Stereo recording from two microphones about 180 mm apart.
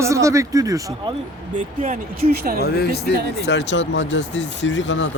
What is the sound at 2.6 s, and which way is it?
Speech, 60° left (ahead or behind).